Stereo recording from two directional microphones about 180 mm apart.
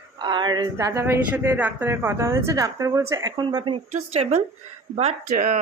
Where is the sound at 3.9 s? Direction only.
40° right (ahead or behind).